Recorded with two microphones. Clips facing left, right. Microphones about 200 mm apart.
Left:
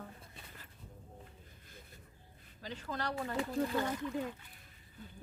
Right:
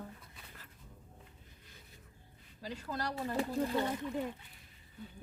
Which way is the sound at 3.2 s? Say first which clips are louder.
Right 4 dB; 35° right (ahead or behind).